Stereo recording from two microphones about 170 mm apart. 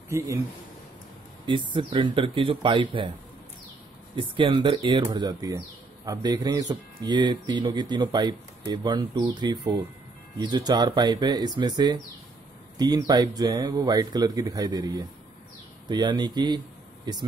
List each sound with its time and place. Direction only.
0.1 s speech: 15° right (ahead or behind)
1.4 s speech: 30° right (ahead or behind)
4.1 s speech: 30° right (ahead or behind)